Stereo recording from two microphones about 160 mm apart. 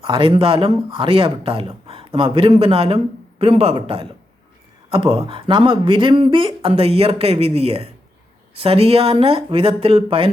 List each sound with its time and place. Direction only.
0.0 s speech: 30° right (ahead or behind)